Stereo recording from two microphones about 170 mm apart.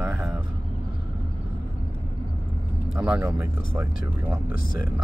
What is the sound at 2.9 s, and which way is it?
Speech, 5° right (ahead or behind).